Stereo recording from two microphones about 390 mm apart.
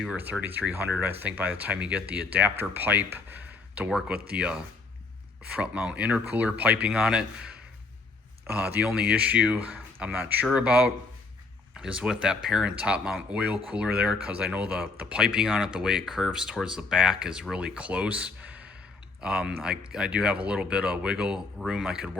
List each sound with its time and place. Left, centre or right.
0.0 s speech: centre